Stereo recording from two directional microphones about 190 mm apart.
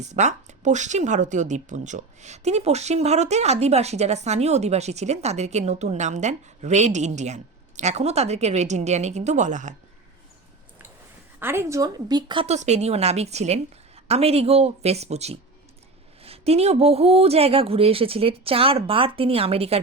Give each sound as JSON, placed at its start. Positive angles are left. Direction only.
{"t": 0.0, "sound": "speech", "side_deg": -35}
{"t": 11.3, "sound": "speech", "side_deg": -10}